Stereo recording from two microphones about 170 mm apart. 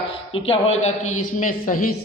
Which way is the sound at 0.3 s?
35° left (ahead or behind).